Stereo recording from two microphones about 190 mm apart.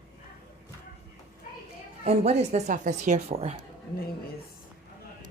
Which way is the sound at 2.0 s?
35° right (ahead or behind).